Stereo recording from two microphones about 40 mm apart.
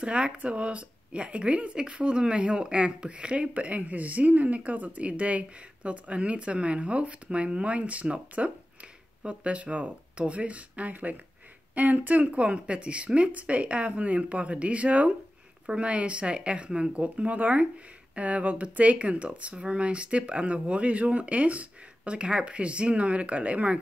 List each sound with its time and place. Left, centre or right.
0.0 s speech: right